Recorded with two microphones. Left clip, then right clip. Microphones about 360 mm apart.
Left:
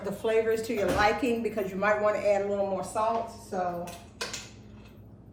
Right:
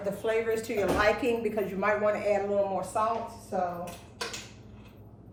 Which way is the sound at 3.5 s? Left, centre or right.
Centre.